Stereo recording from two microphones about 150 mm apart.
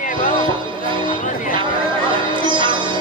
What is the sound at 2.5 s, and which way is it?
Sitar, 30° right (ahead or behind).